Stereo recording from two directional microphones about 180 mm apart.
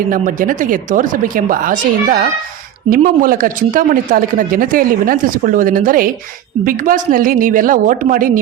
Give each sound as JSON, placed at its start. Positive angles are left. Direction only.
{"t": 0.1, "sound": "speech", "side_deg": -50}